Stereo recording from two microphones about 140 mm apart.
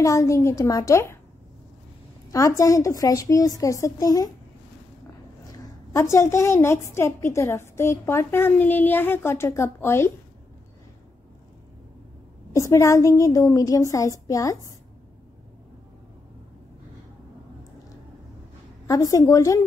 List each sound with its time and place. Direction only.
0.0 s a woman's voice: 20° left (ahead or behind)
2.3 s a woman's voice: 20° left (ahead or behind)
5.5 s a woman's voice: 20° left (ahead or behind)
12.5 s a woman's voice: 20° left (ahead or behind)
18.9 s a woman's voice: 25° left (ahead or behind)